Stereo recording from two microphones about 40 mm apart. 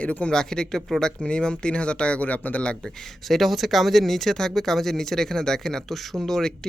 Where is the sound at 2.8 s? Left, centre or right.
Centre.